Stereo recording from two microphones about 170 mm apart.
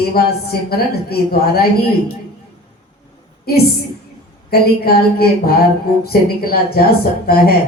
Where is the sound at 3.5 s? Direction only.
65° left (ahead or behind).